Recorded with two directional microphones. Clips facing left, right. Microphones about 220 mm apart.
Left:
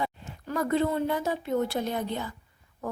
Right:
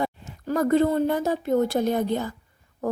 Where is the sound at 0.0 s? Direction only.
45° right (ahead or behind).